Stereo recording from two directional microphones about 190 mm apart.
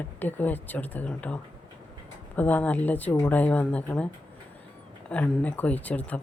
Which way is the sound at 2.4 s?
10° left (ahead or behind).